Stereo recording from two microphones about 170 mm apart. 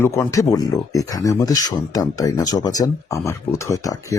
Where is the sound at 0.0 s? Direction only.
20° left (ahead or behind).